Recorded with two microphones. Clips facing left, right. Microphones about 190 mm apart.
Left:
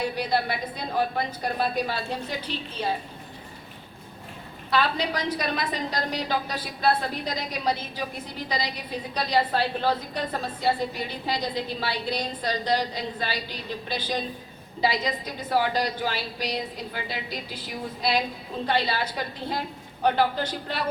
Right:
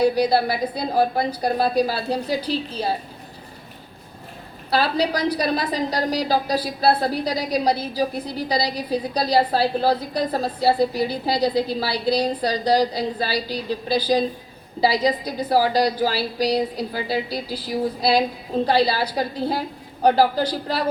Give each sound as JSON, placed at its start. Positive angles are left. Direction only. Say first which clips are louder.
{"t": 0.0, "sound": "a woman's voice", "louder": "right 8 dB", "side_deg": -35}
{"t": 4.7, "sound": "a woman's voice", "louder": "right 5 dB", "side_deg": -35}